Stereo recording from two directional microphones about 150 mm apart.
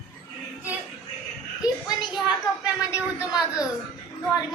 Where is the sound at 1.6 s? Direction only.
30° left (ahead or behind).